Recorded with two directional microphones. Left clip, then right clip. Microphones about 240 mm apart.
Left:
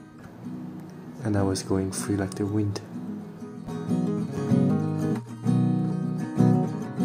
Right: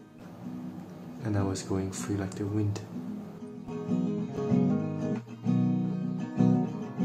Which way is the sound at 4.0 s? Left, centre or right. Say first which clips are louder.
Left 3 dB; left.